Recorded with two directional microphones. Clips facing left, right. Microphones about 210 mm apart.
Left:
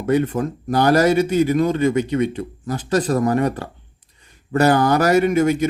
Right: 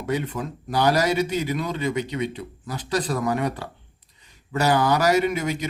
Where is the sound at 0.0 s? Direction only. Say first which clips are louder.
Left 8 dB; 50° left (ahead or behind).